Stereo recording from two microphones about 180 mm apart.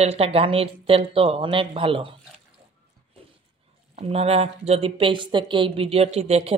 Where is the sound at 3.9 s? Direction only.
35° right (ahead or behind).